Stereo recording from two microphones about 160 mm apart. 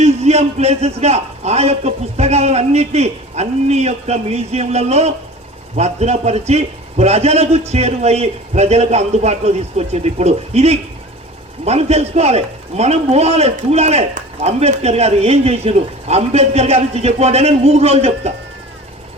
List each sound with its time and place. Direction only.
0.0 s a man's voice: 40° right (ahead or behind)